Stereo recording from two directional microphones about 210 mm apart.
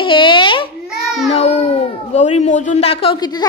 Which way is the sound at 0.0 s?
25° left (ahead or behind).